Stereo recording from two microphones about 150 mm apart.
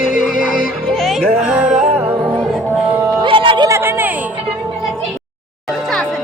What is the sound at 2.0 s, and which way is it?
Music, 15° right (ahead or behind).